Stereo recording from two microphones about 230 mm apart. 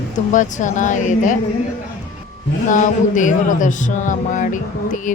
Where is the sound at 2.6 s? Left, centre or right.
Left.